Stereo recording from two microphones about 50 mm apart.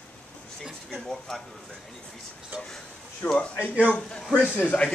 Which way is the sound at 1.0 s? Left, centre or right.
Centre.